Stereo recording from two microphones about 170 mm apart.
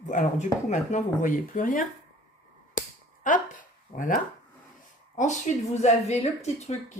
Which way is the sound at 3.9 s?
50° left (ahead or behind).